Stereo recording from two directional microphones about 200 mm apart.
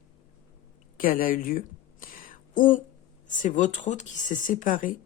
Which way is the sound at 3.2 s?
40° left (ahead or behind).